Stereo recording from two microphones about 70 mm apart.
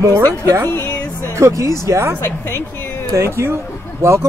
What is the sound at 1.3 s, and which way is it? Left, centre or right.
Speech, right.